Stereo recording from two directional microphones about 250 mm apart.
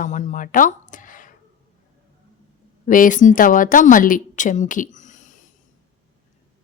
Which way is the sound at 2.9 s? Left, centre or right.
Left.